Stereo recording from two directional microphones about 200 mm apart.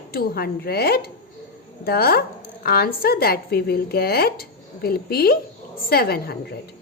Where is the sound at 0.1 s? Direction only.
50° left (ahead or behind).